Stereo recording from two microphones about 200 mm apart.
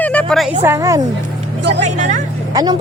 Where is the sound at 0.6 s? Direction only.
15° right (ahead or behind).